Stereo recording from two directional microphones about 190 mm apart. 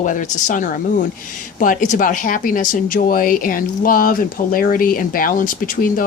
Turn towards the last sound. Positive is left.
turn(degrees=45)  # may be behind; listen again after turning